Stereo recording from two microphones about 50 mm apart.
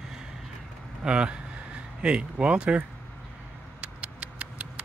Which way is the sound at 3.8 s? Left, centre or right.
Right.